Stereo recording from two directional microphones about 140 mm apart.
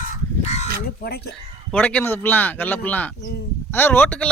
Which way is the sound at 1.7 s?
10° left (ahead or behind).